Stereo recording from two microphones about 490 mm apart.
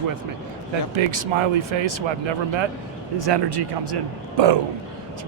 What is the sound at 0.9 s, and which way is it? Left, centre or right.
Speech, right.